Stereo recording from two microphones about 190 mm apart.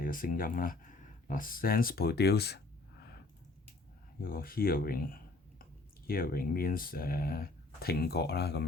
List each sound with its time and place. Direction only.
0.0 s speech: 45° left (ahead or behind)
4.2 s speech: 50° left (ahead or behind)